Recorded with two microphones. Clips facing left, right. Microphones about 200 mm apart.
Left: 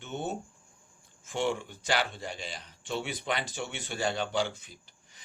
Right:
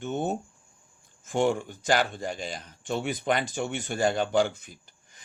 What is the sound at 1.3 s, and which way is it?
Speech, 45° right (ahead or behind).